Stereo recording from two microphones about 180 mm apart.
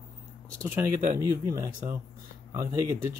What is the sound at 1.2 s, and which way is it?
Speech, 20° right (ahead or behind).